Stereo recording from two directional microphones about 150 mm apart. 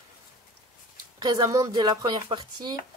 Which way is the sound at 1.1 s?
25° right (ahead or behind).